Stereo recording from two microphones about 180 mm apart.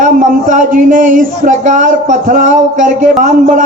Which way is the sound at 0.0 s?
45° right (ahead or behind).